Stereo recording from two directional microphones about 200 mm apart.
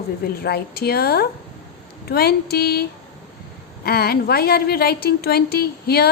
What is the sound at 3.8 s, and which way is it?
A woman's voice, 50° left (ahead or behind).